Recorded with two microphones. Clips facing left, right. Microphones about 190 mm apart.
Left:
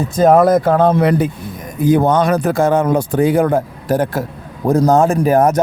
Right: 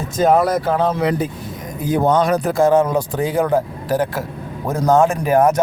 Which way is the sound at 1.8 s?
70° left (ahead or behind).